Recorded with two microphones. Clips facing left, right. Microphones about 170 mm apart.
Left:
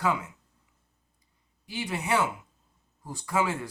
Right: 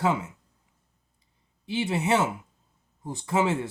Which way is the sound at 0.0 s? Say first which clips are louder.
Right 3 dB; 25° right (ahead or behind).